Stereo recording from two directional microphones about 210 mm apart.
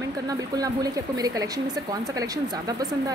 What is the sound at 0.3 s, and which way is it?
A woman's voice, 15° right (ahead or behind).